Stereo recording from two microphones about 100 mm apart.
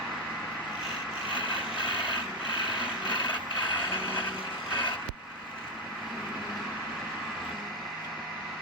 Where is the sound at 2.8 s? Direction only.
55° left (ahead or behind).